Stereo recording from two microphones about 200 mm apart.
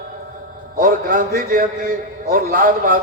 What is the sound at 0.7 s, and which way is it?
A man's voice, 45° right (ahead or behind).